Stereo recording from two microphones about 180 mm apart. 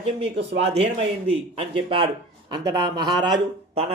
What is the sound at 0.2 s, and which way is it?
Speech, 35° right (ahead or behind).